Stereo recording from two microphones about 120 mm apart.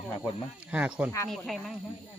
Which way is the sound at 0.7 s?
10° right (ahead or behind).